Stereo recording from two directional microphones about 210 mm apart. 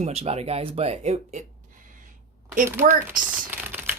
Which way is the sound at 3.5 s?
10° right (ahead or behind).